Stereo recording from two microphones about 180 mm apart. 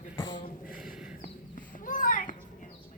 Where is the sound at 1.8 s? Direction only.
50° left (ahead or behind).